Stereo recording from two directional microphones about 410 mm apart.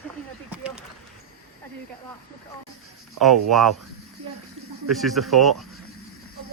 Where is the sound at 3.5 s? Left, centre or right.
Centre.